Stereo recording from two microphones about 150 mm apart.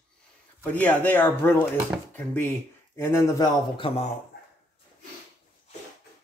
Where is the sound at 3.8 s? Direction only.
40° left (ahead or behind).